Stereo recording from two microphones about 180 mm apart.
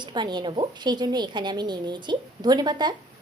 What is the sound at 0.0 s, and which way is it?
A woman's voice, 25° right (ahead or behind).